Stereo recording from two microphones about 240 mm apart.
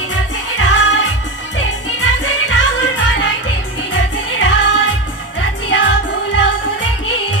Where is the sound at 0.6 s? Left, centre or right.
Left.